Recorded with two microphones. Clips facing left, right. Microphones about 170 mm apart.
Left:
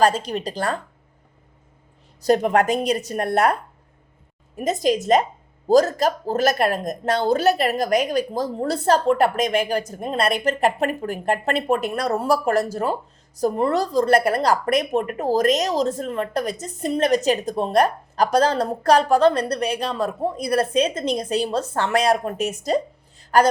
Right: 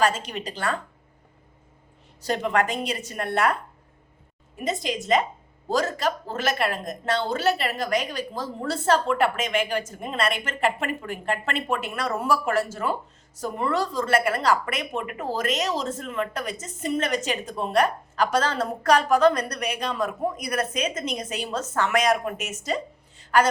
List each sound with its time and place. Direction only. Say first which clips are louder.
0.0 s speech: left 5 dB; 35° left (ahead or behind)
2.2 s speech: left 6 dB; 40° left (ahead or behind)